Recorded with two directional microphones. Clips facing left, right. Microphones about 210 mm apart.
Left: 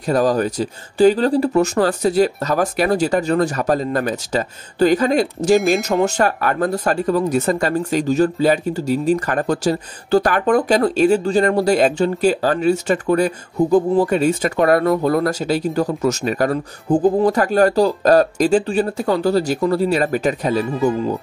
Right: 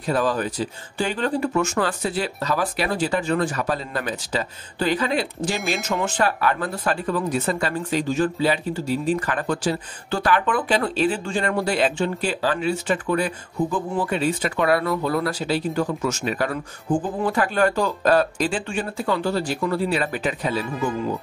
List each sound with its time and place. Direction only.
0.0 s speech: 40° left (ahead or behind)